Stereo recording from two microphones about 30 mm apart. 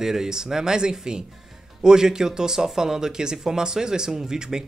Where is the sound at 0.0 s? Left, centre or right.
Centre.